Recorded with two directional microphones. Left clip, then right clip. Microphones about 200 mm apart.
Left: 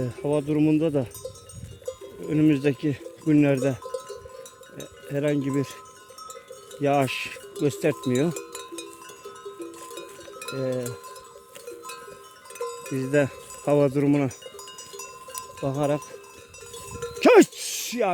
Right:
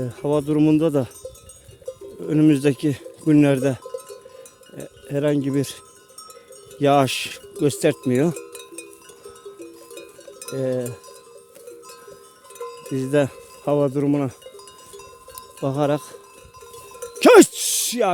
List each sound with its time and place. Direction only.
0.3 s speech: 35° right (ahead or behind)
2.2 s speech: 35° right (ahead or behind)
4.7 s cowbell: 35° right (ahead or behind)
6.8 s speech: 35° right (ahead or behind)
10.6 s speech: 40° right (ahead or behind)
12.9 s wind chime: 25° right (ahead or behind)
13.7 s speech: 10° right (ahead or behind)
15.6 s speech: 40° right (ahead or behind)
17.0 s music: 40° right (ahead or behind)